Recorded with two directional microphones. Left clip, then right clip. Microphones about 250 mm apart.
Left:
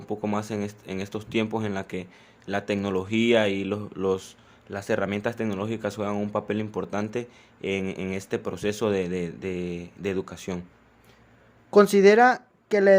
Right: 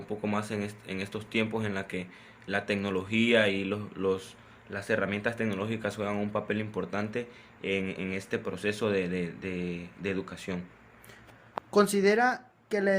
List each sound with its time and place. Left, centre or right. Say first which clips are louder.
0.0 s speech: left 3 dB; left
11.7 s speech: left 8 dB; left